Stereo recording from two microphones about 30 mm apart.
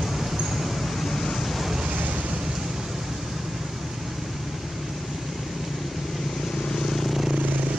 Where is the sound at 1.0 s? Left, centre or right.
Centre.